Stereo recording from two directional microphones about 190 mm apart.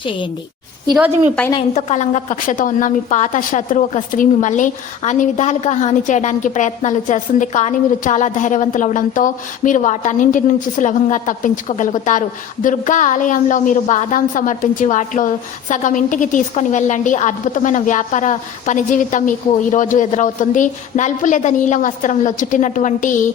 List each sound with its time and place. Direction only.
1.7 s a woman's voice: 35° left (ahead or behind)